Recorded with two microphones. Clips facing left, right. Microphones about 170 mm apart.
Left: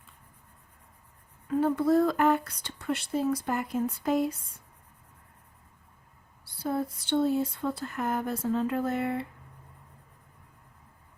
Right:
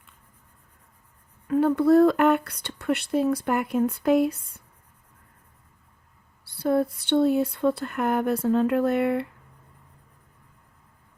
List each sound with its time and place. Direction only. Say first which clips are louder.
1.5 s speech: right 5 dB; 65° right (ahead or behind)
6.4 s speech: right 8 dB; 65° right (ahead or behind)